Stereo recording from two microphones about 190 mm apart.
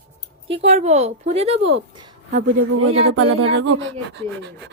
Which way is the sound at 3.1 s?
90° right.